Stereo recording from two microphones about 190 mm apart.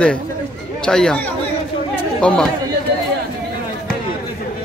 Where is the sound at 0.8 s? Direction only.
5° left (ahead or behind).